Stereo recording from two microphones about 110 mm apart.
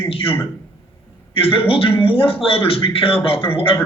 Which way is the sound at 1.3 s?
55° left (ahead or behind).